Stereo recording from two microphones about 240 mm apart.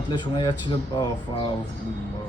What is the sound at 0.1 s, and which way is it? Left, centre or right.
A man's voice, centre.